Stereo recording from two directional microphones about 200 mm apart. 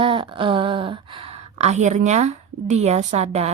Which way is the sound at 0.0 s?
25° right (ahead or behind).